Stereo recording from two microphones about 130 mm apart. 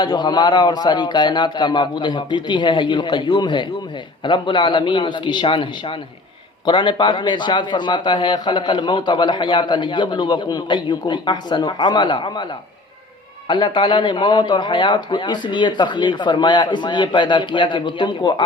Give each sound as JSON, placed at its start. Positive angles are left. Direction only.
{"t": 0.0, "sound": "a man's voice", "side_deg": 35}
{"t": 13.5, "sound": "a man's voice", "side_deg": 35}